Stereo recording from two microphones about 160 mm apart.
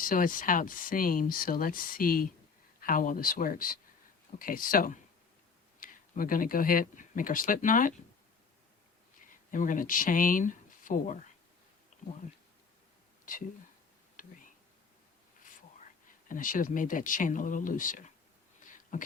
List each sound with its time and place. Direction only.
0.0 s speech: 60° left (ahead or behind)
9.5 s speech: 55° left (ahead or behind)
11.9 s a sound: 45° left (ahead or behind)
13.3 s speech: 55° left (ahead or behind)
14.2 s a sound: 55° left (ahead or behind)
16.3 s speech: 55° left (ahead or behind)
18.9 s beatboxing: 55° left (ahead or behind)